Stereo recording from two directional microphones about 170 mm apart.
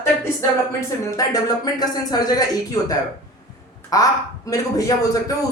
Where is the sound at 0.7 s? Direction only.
20° left (ahead or behind).